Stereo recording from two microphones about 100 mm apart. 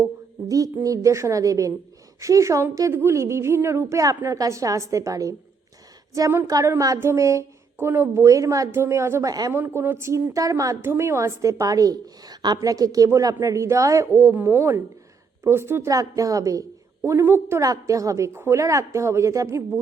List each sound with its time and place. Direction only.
0.4 s a woman's voice: 35° right (ahead or behind)
10.8 s a woman's voice: 25° right (ahead or behind)
17.0 s a woman's voice: 25° right (ahead or behind)